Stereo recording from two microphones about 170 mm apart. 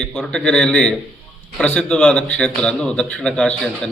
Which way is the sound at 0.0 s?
5° left (ahead or behind).